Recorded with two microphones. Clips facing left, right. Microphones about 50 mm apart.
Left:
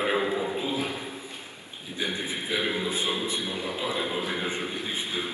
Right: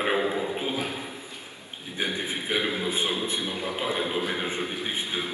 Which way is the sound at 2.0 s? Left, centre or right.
Right.